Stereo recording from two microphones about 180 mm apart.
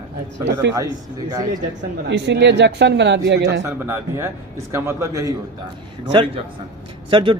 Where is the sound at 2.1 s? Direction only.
75° right (ahead or behind).